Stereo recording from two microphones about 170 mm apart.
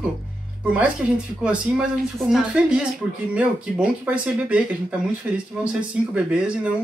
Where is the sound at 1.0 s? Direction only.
5° right (ahead or behind).